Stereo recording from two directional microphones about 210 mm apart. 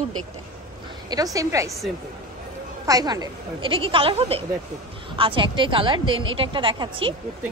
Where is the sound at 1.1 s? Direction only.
15° right (ahead or behind).